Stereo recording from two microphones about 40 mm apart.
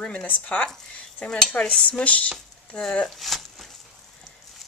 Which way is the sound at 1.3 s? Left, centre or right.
Centre.